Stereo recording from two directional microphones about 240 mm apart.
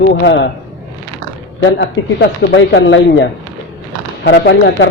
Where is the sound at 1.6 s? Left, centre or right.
Left.